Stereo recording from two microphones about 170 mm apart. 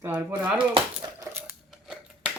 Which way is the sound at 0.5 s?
30° right (ahead or behind).